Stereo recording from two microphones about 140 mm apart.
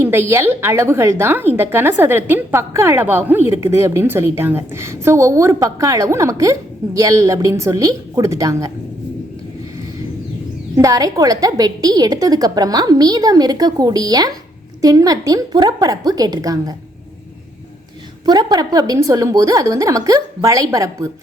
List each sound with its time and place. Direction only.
0.0 s a woman's voice: 15° right (ahead or behind)
10.8 s a woman's voice: 25° right (ahead or behind)
18.3 s a woman's voice: 30° right (ahead or behind)